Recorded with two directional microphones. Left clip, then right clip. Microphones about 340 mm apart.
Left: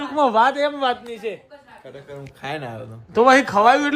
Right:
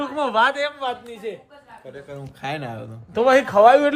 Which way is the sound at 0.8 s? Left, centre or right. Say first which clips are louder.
Left 5 dB; left.